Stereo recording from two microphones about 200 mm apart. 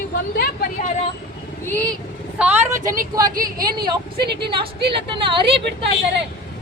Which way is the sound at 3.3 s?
45° right (ahead or behind).